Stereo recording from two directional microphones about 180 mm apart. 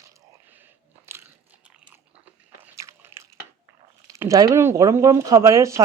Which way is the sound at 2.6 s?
15° right (ahead or behind).